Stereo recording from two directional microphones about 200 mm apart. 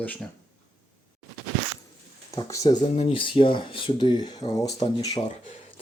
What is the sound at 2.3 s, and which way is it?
Speech, 15° left (ahead or behind).